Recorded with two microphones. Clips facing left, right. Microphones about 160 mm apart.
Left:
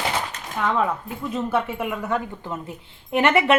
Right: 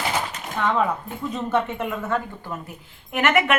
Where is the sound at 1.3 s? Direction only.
5° left (ahead or behind); by 3.5 s 30° left (ahead or behind).